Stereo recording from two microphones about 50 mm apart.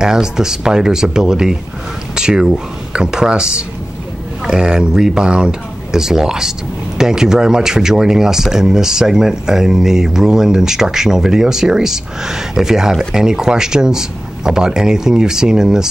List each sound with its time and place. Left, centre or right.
0.0 s speech: centre